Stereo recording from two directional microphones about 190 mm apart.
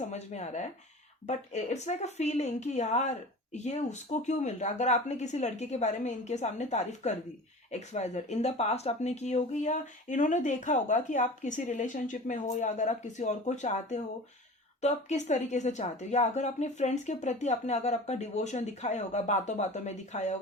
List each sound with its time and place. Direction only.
0.1 s speech: 35° left (ahead or behind)